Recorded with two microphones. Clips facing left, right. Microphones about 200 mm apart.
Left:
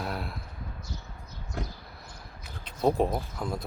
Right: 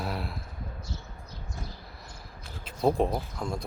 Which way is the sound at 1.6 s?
80° left.